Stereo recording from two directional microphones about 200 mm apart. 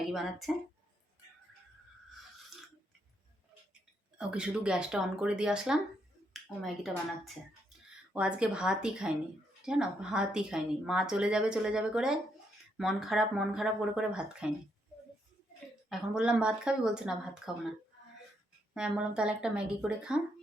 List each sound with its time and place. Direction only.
0.0 s speech: centre (ahead or behind)
4.2 s speech: 5° right (ahead or behind)
8.1 s speech: 5° right (ahead or behind)
15.9 s speech: 5° right (ahead or behind)
18.7 s speech: 5° right (ahead or behind)